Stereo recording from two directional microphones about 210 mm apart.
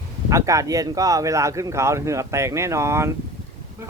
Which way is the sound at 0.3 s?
15° right (ahead or behind).